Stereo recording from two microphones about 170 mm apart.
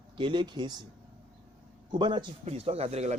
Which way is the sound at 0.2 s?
30° right (ahead or behind).